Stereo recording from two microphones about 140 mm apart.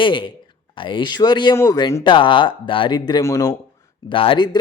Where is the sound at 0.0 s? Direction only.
35° left (ahead or behind).